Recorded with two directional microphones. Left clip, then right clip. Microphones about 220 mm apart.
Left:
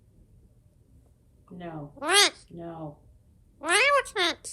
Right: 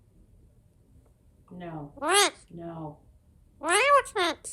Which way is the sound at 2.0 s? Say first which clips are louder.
Left 2 dB; 15° right (ahead or behind).